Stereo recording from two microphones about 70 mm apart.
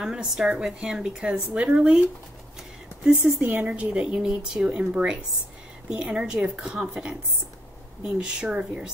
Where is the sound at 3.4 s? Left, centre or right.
Right.